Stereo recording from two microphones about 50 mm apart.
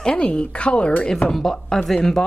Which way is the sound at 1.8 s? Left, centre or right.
Centre.